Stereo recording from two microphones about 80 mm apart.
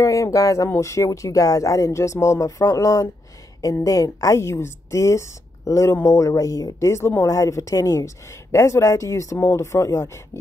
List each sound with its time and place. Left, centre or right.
0.0 s a woman's voice: left